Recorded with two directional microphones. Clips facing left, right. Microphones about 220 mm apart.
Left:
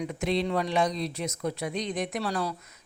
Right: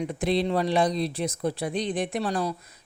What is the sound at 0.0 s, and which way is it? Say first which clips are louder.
Speech: right 3 dB; 35° right (ahead or behind).